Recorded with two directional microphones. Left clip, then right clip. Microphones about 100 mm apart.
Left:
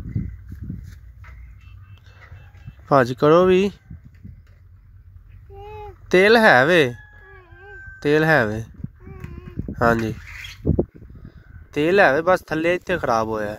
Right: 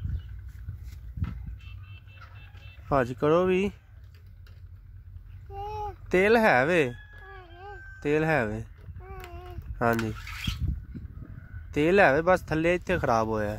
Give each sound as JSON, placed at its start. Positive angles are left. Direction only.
{"t": 2.9, "sound": "speech", "side_deg": 45}
{"t": 6.0, "sound": "speech", "side_deg": 45}
{"t": 8.0, "sound": "speech", "side_deg": 50}
{"t": 9.8, "sound": "speech", "side_deg": 45}
{"t": 11.7, "sound": "speech", "side_deg": 45}